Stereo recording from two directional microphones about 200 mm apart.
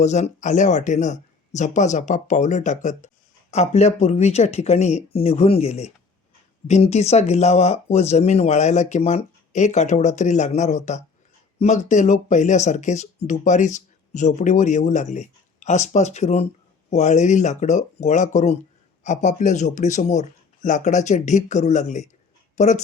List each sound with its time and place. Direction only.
0.0 s speech: 35° left (ahead or behind)